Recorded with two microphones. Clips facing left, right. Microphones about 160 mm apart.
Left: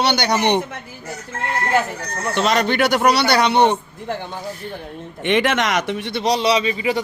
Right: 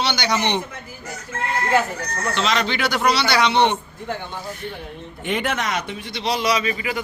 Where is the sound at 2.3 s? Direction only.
50° left (ahead or behind).